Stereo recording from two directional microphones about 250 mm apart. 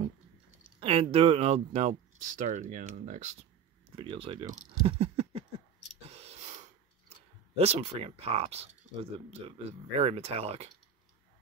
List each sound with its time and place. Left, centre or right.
0.7 s speech: right
6.0 s a sound: right
7.5 s speech: right